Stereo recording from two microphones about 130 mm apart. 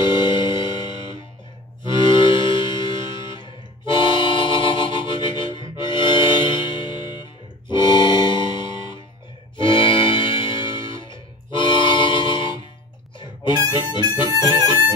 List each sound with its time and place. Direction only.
0.0 s music: 35° left (ahead or behind)
13.2 s harmonica: 35° left (ahead or behind)
14.3 s music: 30° right (ahead or behind)